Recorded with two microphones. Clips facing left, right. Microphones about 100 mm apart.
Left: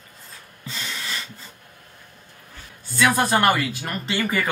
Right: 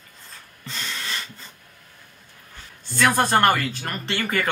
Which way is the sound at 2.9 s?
5° left (ahead or behind).